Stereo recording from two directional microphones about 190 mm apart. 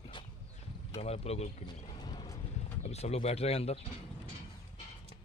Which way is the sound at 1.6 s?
25° left (ahead or behind).